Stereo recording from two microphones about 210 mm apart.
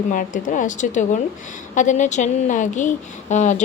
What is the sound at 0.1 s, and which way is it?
Speech, 40° left (ahead or behind).